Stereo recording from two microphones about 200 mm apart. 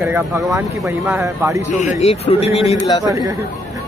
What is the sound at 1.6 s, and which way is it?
A man's voice, 35° left (ahead or behind).